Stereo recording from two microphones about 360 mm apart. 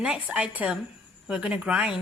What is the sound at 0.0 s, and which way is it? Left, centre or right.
Speech, centre.